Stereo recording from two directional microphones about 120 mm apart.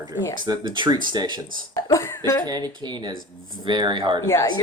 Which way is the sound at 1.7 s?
25° left (ahead or behind).